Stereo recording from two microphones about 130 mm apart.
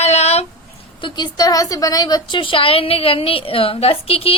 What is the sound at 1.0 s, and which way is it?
A woman's voice, 40° left (ahead or behind).